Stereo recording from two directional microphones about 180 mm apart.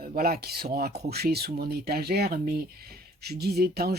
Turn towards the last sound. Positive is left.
turn(degrees=-60)  # may be behind; listen again after turning